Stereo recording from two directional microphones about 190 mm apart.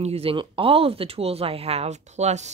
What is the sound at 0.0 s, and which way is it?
Speech, 30° right (ahead or behind).